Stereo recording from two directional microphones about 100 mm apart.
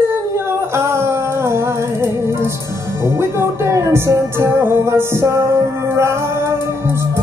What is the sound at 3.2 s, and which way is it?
Music, 25° right (ahead or behind).